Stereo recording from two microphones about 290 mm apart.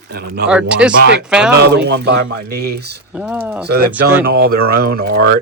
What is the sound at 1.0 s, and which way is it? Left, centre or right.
Speech, right.